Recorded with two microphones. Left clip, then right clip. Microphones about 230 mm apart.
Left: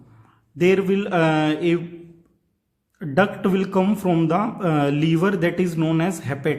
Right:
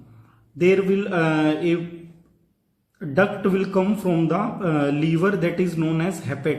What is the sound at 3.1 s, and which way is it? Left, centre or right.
Speech, left.